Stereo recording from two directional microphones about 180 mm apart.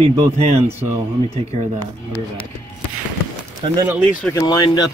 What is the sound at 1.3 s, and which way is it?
Speech, 40° right (ahead or behind).